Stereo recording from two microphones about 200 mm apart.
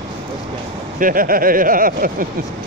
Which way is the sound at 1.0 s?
45° right (ahead or behind).